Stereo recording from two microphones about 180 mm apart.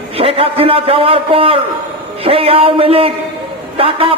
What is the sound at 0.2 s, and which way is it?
A man's voice, 30° right (ahead or behind).